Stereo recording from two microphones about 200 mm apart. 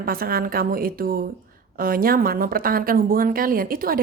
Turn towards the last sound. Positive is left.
turn(degrees=-45)  # may be behind; listen again after turning